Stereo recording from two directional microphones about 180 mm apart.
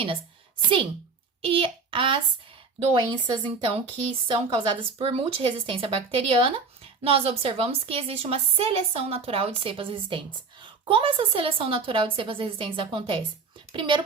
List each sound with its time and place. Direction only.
1.4 s child singing: 30° right (ahead or behind)
2.9 s a woman's voice: 30° right (ahead or behind)